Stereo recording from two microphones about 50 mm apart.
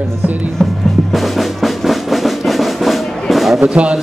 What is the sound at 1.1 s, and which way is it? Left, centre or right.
Drum, centre.